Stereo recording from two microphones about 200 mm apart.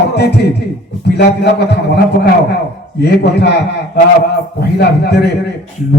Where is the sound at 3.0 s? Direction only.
55° left (ahead or behind).